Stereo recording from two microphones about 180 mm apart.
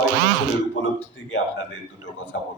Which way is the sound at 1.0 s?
85° left.